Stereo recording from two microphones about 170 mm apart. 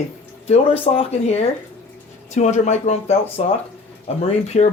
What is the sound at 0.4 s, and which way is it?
Speech, 35° left (ahead or behind).